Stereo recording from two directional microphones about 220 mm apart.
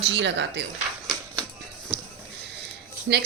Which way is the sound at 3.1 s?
50° right (ahead or behind).